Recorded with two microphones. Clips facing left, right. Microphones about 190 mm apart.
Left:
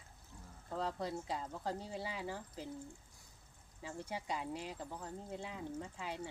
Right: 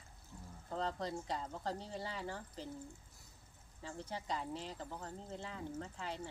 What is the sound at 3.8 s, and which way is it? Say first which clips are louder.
Speech: left 1 dB; 10° left (ahead or behind).